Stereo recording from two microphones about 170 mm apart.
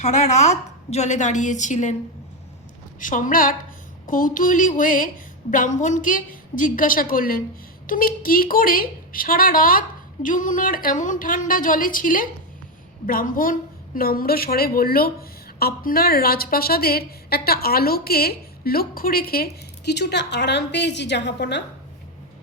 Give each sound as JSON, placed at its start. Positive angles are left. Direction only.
{"t": 0.0, "sound": "a woman's voice", "side_deg": 45}
{"t": 3.0, "sound": "a woman's voice", "side_deg": 50}